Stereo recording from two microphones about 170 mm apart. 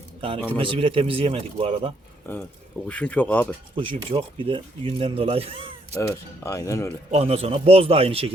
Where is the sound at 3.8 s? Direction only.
30° right (ahead or behind).